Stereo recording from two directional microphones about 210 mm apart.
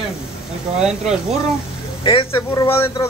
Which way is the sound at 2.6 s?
10° left (ahead or behind).